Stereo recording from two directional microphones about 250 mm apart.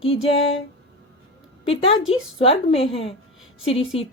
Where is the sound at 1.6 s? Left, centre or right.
Left.